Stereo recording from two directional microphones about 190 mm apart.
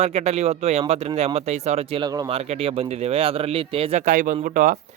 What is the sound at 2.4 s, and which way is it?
Speech, 30° right (ahead or behind).